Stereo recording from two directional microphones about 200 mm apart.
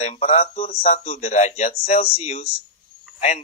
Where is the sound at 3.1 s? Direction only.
35° left (ahead or behind).